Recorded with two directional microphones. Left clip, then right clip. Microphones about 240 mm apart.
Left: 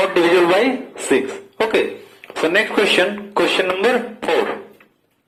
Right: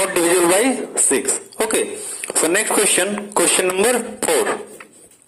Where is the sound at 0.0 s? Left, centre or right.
Right.